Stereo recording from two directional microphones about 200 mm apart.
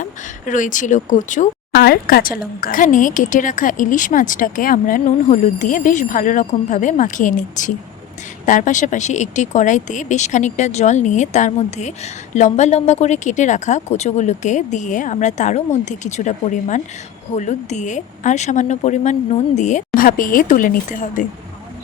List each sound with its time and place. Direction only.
0.0 s speech: 40° left (ahead or behind)
1.8 s speech: 50° left (ahead or behind)